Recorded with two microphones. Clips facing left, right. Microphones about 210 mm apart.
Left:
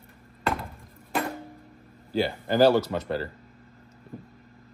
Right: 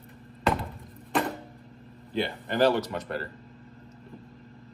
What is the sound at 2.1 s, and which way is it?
Speech, 35° left (ahead or behind).